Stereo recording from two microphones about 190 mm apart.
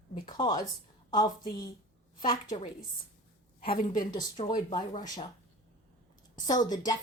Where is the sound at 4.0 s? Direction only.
20° left (ahead or behind).